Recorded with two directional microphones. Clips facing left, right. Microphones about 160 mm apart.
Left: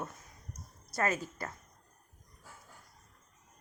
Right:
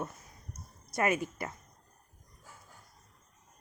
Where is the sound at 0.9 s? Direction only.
15° right (ahead or behind).